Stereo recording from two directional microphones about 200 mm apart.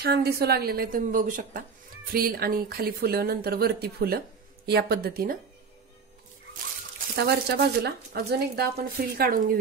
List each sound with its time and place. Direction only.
0.0 s speech: 50° right (ahead or behind)
7.2 s speech: 55° right (ahead or behind)